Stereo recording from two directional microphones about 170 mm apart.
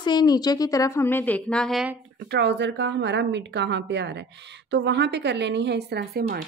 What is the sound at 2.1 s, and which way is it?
A woman's voice, 75° right (ahead or behind).